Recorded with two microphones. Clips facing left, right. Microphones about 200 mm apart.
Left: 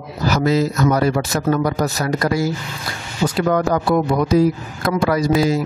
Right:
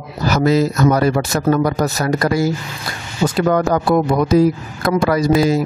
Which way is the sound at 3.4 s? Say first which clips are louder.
Right 2 dB; 45° right (ahead or behind).